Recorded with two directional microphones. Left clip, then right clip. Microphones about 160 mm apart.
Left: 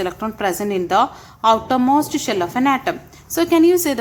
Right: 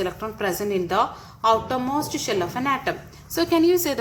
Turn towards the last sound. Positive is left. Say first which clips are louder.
# left 5 dB
turn(degrees=30)  # may be behind; listen again after turning